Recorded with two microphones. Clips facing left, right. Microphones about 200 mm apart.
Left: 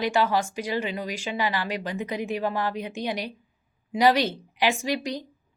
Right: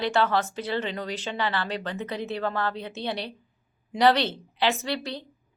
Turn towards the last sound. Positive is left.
turn(degrees=15)  # may be behind; listen again after turning